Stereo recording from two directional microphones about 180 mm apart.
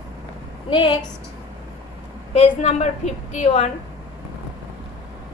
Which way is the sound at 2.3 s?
40° left (ahead or behind).